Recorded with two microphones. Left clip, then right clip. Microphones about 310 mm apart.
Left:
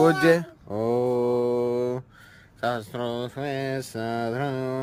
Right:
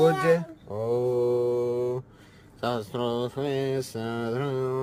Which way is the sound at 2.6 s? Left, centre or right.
Centre.